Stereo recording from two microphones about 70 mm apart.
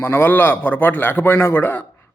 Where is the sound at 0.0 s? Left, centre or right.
Left.